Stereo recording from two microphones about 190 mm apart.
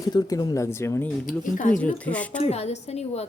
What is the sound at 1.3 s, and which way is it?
Speech, 45° left (ahead or behind).